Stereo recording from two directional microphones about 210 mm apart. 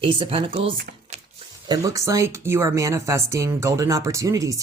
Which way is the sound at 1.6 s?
15° right (ahead or behind).